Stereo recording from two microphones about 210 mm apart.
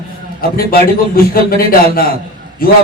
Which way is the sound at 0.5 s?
45° left (ahead or behind).